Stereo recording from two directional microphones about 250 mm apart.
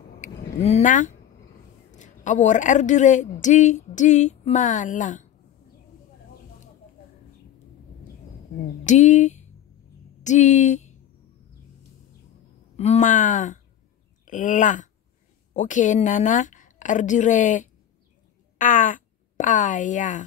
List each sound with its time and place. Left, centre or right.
0.2 s a sound: left
1.9 s a woman's voice: left
8.8 s speech: left
12.7 s a woman's voice: left